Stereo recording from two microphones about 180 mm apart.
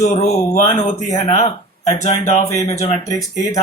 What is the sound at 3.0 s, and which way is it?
Speech, 20° left (ahead or behind).